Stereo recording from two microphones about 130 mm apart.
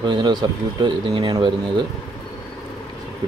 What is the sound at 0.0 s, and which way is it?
Speech, 35° right (ahead or behind).